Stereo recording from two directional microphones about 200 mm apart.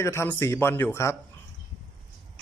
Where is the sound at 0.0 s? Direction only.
15° left (ahead or behind).